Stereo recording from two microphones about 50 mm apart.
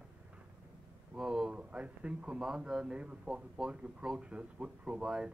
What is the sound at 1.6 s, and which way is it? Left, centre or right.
Speech, right.